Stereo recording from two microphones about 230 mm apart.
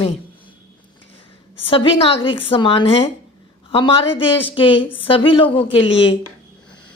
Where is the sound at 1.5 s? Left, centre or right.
Left.